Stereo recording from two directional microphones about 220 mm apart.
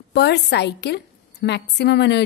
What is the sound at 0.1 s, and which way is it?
A woman's voice, 50° left (ahead or behind).